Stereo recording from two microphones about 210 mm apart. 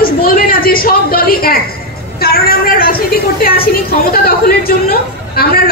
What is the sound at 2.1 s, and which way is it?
A woman's voice, 45° left (ahead or behind).